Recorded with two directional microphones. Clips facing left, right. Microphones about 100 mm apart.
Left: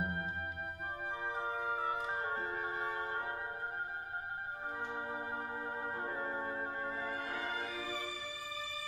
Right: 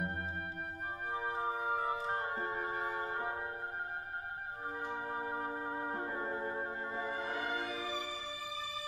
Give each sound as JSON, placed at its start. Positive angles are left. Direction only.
{"t": 1.2, "sound": "music", "side_deg": -5}
{"t": 7.0, "sound": "music", "side_deg": -20}